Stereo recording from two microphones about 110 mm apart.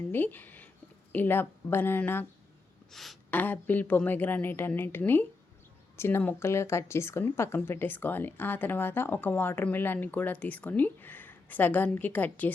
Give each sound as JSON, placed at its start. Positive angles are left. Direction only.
{"t": 0.1, "sound": "speech", "side_deg": 15}
{"t": 2.9, "sound": "speech", "side_deg": 0}
{"t": 3.2, "sound": "speech", "side_deg": 15}